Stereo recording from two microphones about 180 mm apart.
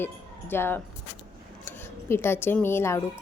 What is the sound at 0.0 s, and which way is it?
A woman's voice, 10° left (ahead or behind).